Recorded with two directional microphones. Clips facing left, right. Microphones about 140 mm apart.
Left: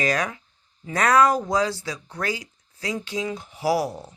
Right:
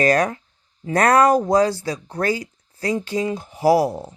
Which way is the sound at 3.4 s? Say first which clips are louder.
Right 7 dB; 45° right (ahead or behind).